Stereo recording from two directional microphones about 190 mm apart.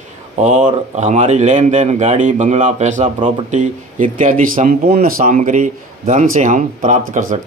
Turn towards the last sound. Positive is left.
turn(degrees=-45)  # may be behind; listen again after turning